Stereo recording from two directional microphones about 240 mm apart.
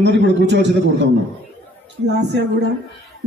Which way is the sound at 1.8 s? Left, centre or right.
Right.